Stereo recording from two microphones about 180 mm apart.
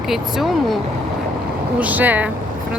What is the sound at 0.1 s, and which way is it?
Speech, centre (ahead or behind).